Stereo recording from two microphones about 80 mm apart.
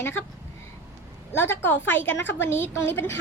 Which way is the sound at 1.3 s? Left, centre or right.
Left.